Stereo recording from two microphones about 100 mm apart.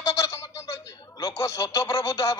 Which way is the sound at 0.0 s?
30° left (ahead or behind).